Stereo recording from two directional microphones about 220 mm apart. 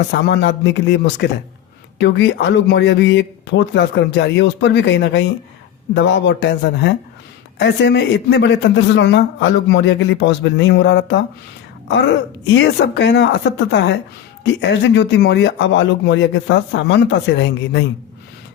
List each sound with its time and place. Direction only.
0.1 s a man's voice: 50° left (ahead or behind)